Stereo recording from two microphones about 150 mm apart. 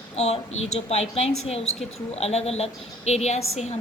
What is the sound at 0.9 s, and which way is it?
Speech, 45° left (ahead or behind).